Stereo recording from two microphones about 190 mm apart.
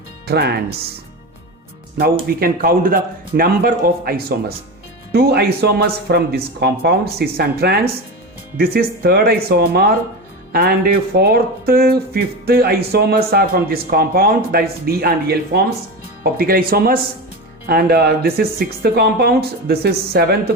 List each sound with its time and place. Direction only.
0.3 s speech: 60° right (ahead or behind)
2.2 s speech: 50° right (ahead or behind)